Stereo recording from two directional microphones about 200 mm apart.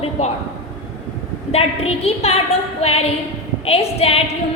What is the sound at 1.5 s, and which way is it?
A woman's voice, 30° left (ahead or behind).